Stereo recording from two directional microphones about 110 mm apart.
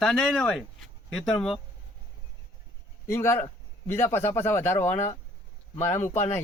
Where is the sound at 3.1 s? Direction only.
20° left (ahead or behind).